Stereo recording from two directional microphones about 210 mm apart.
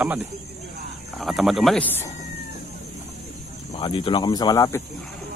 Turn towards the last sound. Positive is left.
turn(degrees=15)  # may be behind; listen again after turning